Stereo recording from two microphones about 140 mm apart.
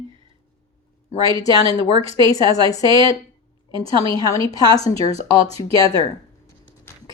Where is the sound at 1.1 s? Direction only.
25° left (ahead or behind).